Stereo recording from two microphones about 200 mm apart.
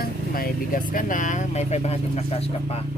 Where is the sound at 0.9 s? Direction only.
40° left (ahead or behind).